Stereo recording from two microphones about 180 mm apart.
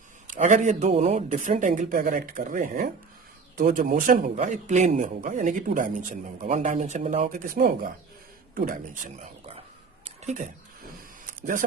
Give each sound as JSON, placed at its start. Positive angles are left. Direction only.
{"t": 0.3, "sound": "a man's voice", "side_deg": -45}